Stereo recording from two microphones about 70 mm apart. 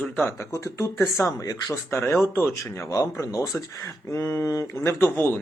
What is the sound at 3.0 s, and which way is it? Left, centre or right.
Speech, left.